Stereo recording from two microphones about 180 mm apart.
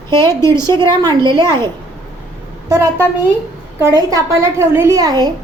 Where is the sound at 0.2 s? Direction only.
15° left (ahead or behind).